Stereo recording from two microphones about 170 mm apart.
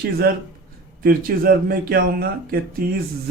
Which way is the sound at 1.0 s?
60° right (ahead or behind).